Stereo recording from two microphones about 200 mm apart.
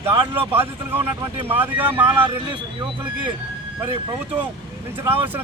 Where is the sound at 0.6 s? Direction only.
10° right (ahead or behind).